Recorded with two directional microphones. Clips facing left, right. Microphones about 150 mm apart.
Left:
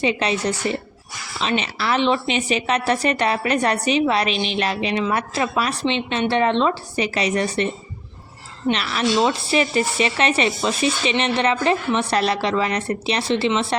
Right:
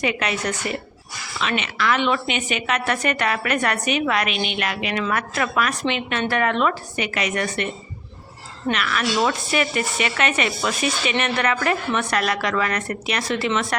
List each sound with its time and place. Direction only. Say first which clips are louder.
0.0 s a woman's voice: left 3 dB; 30° left (ahead or behind)
8.7 s speech: left 2 dB; 30° left (ahead or behind)